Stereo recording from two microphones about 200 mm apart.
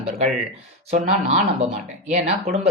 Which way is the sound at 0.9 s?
35° right (ahead or behind).